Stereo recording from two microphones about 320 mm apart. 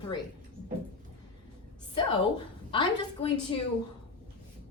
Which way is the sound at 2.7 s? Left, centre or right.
Centre.